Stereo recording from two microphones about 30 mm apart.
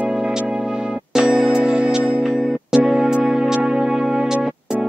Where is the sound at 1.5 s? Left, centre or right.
Right.